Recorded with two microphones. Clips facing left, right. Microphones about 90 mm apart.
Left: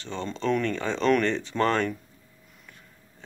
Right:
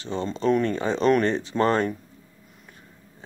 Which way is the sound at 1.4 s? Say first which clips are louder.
Right 3 dB; 20° right (ahead or behind).